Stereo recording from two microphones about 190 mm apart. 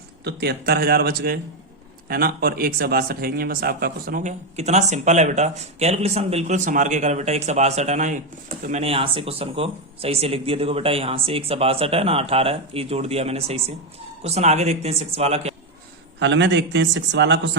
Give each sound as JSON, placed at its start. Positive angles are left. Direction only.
{"t": 0.3, "sound": "speech", "side_deg": -60}
{"t": 16.2, "sound": "speech", "side_deg": -70}